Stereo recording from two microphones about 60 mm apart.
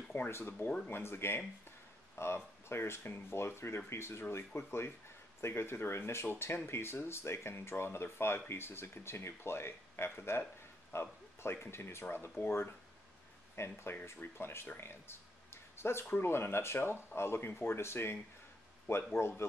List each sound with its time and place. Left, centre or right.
0.3 s speech: left